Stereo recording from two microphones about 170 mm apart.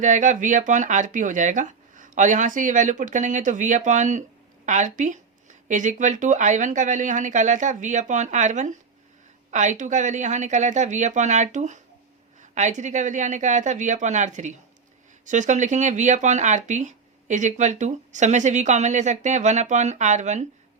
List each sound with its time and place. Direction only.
0.0 s speech: 45° right (ahead or behind)